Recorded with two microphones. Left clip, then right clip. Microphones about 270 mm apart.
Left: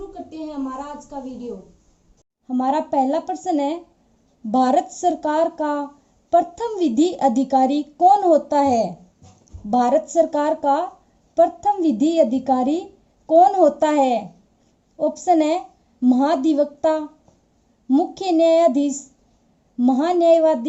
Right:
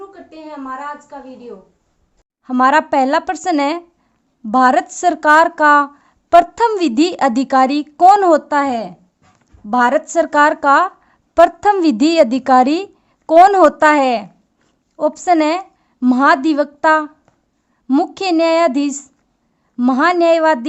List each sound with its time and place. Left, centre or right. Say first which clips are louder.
2.5 s a woman's voice: right 9 dB; right